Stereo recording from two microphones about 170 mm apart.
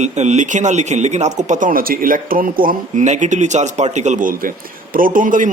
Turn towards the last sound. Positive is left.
turn(degrees=-50)  # may be behind; listen again after turning